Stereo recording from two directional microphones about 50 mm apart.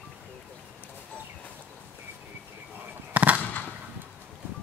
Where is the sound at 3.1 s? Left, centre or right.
Right.